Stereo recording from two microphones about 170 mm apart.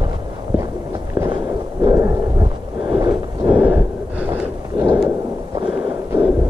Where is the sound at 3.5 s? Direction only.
10° right (ahead or behind).